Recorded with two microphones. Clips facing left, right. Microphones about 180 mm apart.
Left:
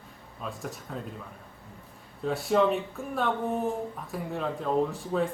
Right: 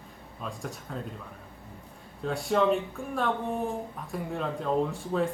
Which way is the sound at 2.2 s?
Centre (ahead or behind).